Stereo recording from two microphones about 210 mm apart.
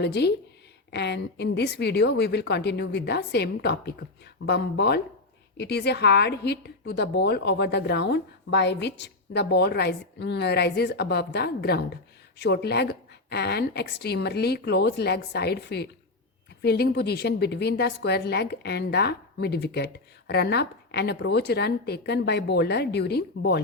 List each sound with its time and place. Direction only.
0.0 s a woman's voice: 55° left (ahead or behind)